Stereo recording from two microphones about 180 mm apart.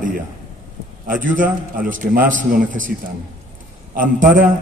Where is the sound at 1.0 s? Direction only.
50° right (ahead or behind).